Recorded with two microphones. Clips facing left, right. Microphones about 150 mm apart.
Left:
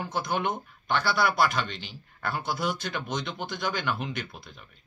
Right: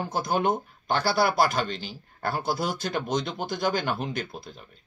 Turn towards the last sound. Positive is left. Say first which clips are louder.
# right 4 dB
turn(degrees=-35)  # may be behind; listen again after turning